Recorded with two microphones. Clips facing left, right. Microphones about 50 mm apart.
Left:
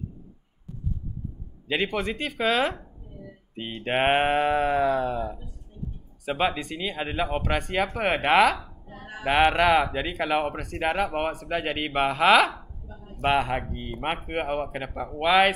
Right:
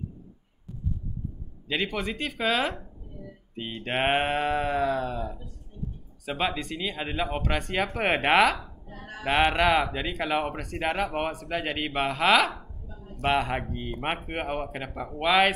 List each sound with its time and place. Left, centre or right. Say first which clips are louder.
1.7 s speech: left 3 dB; centre
3.5 s a sound: left 3 dB; centre
6.2 s speech: left 3 dB; centre